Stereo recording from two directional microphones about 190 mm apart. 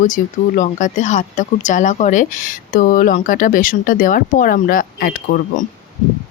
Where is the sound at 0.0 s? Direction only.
40° left (ahead or behind).